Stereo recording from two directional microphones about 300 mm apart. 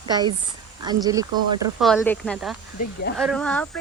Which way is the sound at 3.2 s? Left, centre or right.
Centre.